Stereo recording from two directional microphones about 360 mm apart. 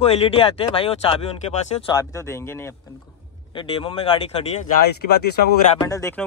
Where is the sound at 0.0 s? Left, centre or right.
Centre.